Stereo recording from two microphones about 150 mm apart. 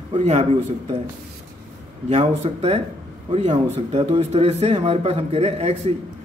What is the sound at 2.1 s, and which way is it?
A man's voice, 45° right (ahead or behind).